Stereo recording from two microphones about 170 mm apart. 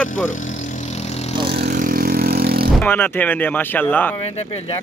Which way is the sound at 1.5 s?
70° right (ahead or behind).